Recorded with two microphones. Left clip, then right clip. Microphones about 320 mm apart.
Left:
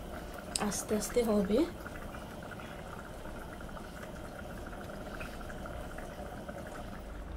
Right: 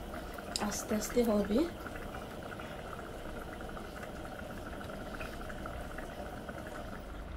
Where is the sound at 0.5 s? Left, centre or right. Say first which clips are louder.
Left 2 dB; left.